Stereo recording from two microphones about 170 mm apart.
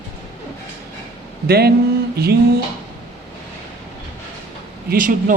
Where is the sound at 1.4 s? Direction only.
70° right (ahead or behind).